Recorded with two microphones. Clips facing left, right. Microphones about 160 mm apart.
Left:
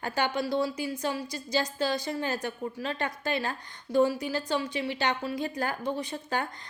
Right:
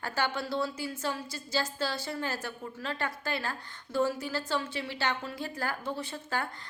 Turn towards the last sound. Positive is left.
turn(degrees=20)  # may be behind; listen again after turning